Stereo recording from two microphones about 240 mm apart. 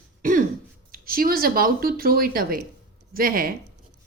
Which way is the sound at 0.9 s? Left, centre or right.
Right.